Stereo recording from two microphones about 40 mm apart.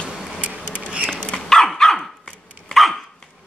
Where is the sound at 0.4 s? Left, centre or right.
Right.